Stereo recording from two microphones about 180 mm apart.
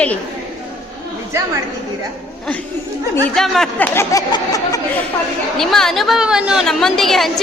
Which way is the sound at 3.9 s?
15° left (ahead or behind).